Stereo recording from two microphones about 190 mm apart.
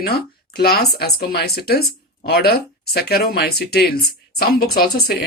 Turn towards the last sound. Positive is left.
turn(degrees=55)  # may be behind; listen again after turning